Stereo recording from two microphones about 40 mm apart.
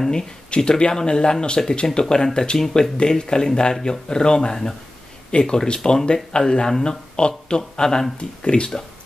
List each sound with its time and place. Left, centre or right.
0.1 s speech: left